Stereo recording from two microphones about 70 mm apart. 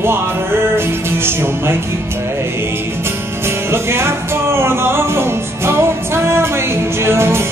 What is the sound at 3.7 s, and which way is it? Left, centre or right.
Music, right.